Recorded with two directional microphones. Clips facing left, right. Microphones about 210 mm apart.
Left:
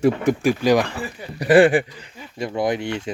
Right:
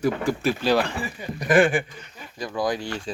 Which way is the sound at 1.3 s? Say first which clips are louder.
Left 5 dB; 35° left (ahead or behind).